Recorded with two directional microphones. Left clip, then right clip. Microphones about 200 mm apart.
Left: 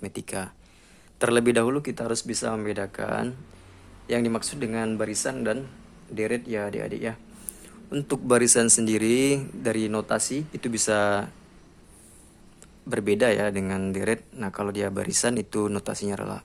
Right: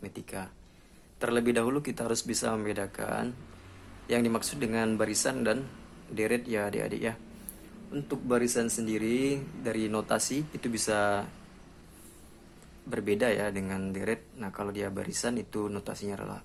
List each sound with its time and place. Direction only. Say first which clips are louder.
0.0 s speech: left 7 dB; 35° left (ahead or behind); by 7.2 s 10° left (ahead or behind)
7.9 s speech: left 7 dB; 40° left (ahead or behind)
12.9 s speech: left 6 dB; 30° left (ahead or behind)